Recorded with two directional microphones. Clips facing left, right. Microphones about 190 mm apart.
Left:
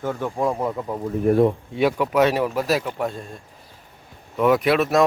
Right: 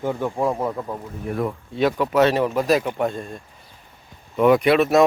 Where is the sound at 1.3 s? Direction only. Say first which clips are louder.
Left 9 dB; 45° left (ahead or behind).